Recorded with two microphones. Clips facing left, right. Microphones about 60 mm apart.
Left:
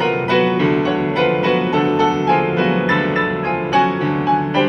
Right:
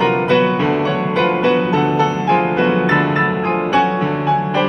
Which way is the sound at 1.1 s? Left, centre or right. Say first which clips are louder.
Right 1 dB; centre.